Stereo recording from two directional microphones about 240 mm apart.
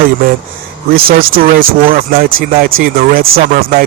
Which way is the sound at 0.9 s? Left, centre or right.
Right.